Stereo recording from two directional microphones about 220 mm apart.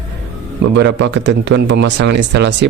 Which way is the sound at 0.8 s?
55° right (ahead or behind).